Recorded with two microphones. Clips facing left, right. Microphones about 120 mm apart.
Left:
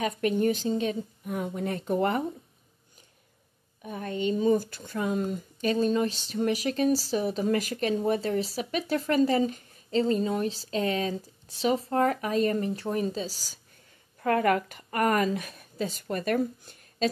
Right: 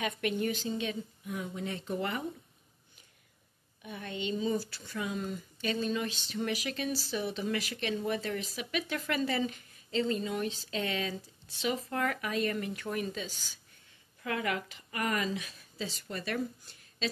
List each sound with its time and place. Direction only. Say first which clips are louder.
0.0 s a woman's voice: left 7 dB; 40° left (ahead or behind)
3.8 s speech: left 8 dB; 40° left (ahead or behind)
14.2 s a woman's voice: left 10 dB; 50° left (ahead or behind)